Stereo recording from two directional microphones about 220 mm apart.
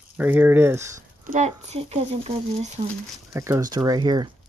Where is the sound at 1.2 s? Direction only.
35° right (ahead or behind).